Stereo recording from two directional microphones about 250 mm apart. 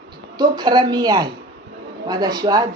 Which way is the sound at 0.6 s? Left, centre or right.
Centre.